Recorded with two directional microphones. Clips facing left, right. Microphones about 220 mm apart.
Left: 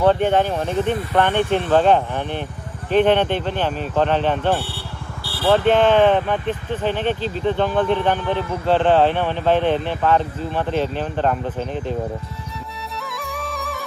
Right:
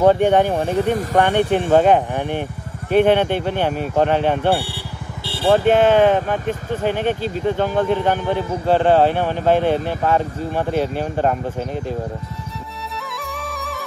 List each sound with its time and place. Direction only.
0.0 s speech: 15° right (ahead or behind)
0.8 s speech: 45° right (ahead or behind)
1.2 s speech: 15° right (ahead or behind)
5.3 s vehicle: 25° right (ahead or behind)
5.7 s speech: 10° right (ahead or behind)
6.1 s speech: 45° right (ahead or behind)
6.8 s speech: 10° right (ahead or behind)
13.2 s music: centre (ahead or behind)